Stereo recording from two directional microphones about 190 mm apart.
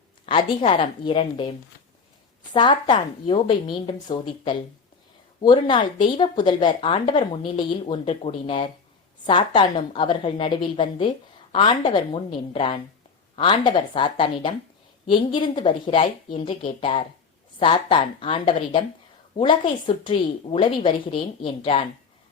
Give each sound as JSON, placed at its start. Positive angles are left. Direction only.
{"t": 0.3, "sound": "speech", "side_deg": 25}